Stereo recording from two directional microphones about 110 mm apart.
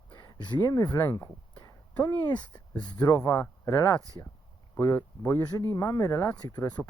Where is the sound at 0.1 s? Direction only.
40° left (ahead or behind).